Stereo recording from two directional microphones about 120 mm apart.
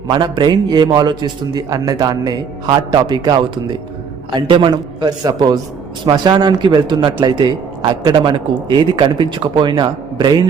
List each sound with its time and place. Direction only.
0.1 s a man's voice: 40° right (ahead or behind)